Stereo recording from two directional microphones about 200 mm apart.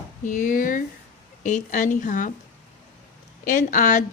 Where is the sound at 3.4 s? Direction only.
40° left (ahead or behind).